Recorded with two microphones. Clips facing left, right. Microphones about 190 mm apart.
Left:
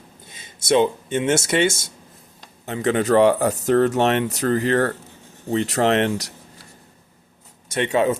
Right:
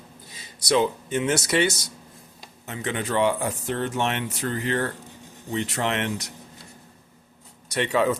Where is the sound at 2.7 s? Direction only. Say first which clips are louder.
Left 9 dB; 40° left (ahead or behind).